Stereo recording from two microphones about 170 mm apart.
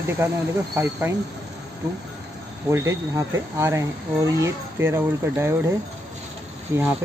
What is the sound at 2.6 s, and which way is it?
Speech, 15° right (ahead or behind).